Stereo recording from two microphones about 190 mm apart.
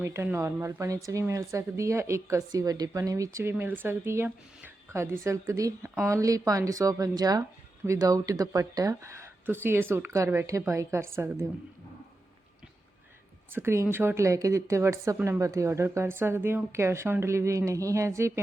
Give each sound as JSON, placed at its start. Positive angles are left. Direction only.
{"t": 0.0, "sound": "speech", "side_deg": -15}
{"t": 13.5, "sound": "speech", "side_deg": -15}